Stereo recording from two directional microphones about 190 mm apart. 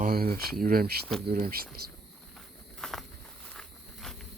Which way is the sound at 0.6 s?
50° right (ahead or behind).